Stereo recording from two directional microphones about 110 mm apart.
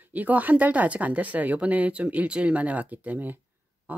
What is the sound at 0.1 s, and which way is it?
Speech, 15° right (ahead or behind).